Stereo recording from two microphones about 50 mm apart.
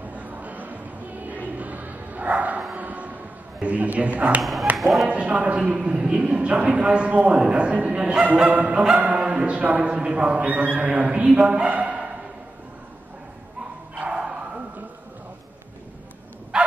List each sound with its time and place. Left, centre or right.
0.1 s a sound: right
1.6 s music: right
2.7 s a sound: right
3.6 s a man's voice: right
4.4 s speech: centre
5.0 s a man's voice: right
13.9 s bow-wow: right